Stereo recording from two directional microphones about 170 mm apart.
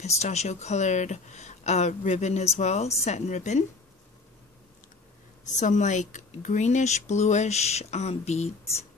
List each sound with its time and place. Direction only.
0.0 s speech: 40° left (ahead or behind)
5.5 s speech: 45° left (ahead or behind)